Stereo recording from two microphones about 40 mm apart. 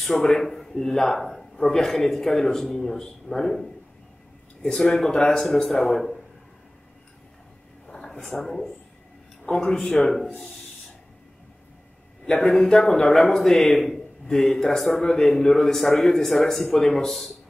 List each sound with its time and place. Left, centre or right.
0.0 s a man's voice: centre
7.8 s a sound: centre
8.1 s a man's voice: centre; by 9.9 s left
9.9 s a man's voice: centre
12.3 s a man's voice: centre